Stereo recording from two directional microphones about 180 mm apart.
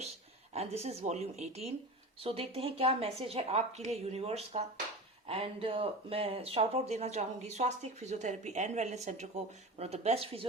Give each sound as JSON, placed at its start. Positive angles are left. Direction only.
{"t": 0.5, "sound": "speech", "side_deg": -35}